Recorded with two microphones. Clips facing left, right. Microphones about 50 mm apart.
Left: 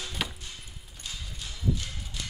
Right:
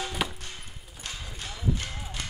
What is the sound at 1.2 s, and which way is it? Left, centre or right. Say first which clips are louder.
Clip-clop: right 1 dB; right.